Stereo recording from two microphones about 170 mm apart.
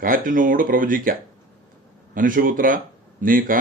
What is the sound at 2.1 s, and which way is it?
Speech, 55° right (ahead or behind).